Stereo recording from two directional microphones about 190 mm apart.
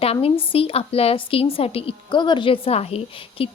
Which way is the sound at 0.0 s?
30° left (ahead or behind).